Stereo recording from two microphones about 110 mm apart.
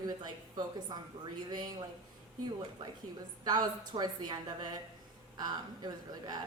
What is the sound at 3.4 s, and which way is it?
A woman's voice, 40° right (ahead or behind).